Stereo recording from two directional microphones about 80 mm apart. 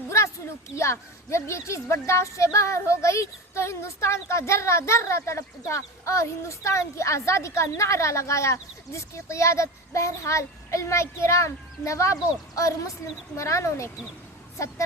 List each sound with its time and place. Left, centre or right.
0.1 s speech: left